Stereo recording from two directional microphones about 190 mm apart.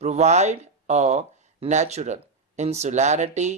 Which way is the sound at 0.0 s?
35° right (ahead or behind).